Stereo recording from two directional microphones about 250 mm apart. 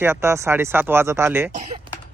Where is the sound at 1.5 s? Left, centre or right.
Right.